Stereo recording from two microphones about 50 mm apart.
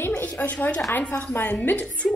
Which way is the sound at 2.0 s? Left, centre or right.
Centre.